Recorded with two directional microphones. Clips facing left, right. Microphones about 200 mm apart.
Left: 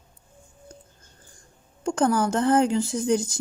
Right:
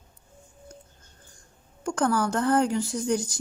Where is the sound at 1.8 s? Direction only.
25° left (ahead or behind).